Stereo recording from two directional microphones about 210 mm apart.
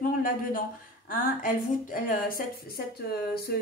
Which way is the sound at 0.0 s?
40° left (ahead or behind).